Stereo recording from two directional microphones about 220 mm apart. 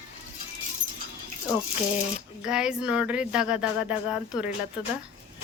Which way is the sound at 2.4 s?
5° right (ahead or behind).